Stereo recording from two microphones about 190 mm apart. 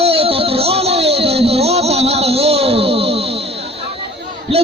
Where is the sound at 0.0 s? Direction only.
30° right (ahead or behind).